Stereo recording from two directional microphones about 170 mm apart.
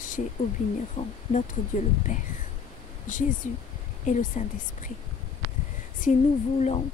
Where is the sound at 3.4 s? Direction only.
50° left (ahead or behind).